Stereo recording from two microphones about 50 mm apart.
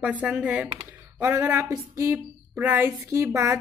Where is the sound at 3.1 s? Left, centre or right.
Right.